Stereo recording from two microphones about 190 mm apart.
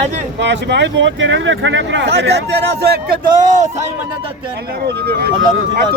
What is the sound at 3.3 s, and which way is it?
Speech, 40° right (ahead or behind).